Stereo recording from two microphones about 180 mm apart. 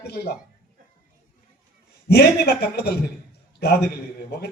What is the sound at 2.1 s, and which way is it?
Speech, 65° left (ahead or behind).